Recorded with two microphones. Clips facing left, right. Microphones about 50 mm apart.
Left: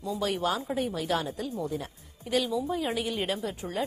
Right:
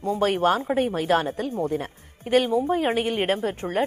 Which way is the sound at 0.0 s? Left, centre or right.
Right.